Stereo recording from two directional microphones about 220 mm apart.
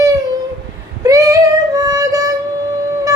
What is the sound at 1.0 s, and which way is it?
Child singing, 15° right (ahead or behind).